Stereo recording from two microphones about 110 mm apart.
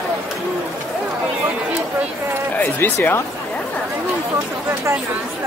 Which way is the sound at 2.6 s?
20° left (ahead or behind).